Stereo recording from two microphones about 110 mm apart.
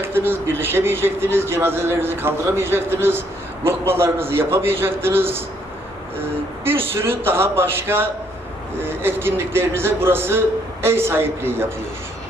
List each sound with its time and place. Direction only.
0.0 s a man's voice: 20° right (ahead or behind)
6.7 s a man's voice: 20° right (ahead or behind)